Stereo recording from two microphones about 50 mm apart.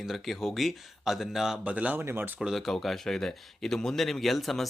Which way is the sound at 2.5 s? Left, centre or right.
Centre.